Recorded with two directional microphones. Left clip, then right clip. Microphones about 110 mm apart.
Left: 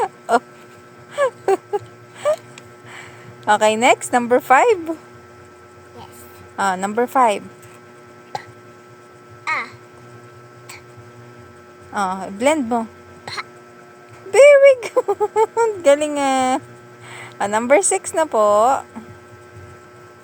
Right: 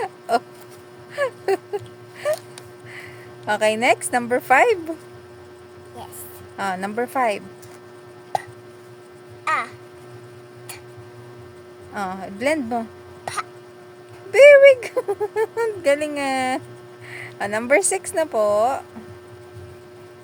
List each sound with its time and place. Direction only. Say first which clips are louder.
0.0 s chicken: left 4 dB; 25° left (ahead or behind)
1.1 s a sound: left 4 dB; 25° left (ahead or behind)
2.9 s a sound: even; 30° left (ahead or behind)
4.2 s speech: left 2 dB; 30° left (ahead or behind)
6.6 s speech: left 6 dB; 30° left (ahead or behind)
9.4 s music: even; 30° right (ahead or behind)
11.9 s speech: left 6 dB; 35° left (ahead or behind)
14.3 s a sound: even; 30° left (ahead or behind)
17.1 s a woman's voice: left 5 dB; 30° left (ahead or behind)